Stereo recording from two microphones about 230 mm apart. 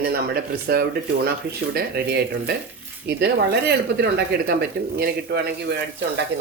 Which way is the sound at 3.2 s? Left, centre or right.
Right.